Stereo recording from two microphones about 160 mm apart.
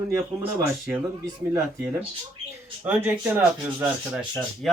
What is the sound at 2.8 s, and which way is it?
Speech, 10° right (ahead or behind).